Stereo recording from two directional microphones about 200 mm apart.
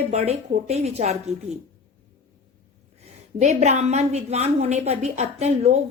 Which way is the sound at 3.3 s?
35° right (ahead or behind).